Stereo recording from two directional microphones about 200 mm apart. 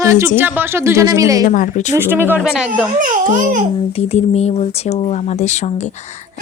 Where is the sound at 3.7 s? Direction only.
30° left (ahead or behind).